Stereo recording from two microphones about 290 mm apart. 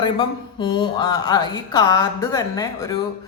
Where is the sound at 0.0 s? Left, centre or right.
Centre.